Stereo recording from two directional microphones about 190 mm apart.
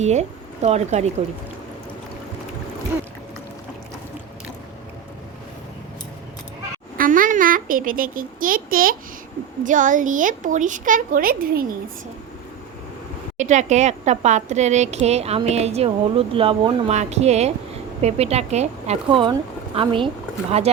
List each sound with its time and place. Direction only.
0.0 s speech: 35° right (ahead or behind)
6.9 s a sound: 45° right (ahead or behind)
8.4 s a child's voice: 45° right (ahead or behind)
13.3 s speech: 40° right (ahead or behind)